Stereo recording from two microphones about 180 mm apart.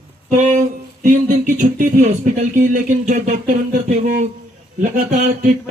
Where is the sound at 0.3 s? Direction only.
40° right (ahead or behind).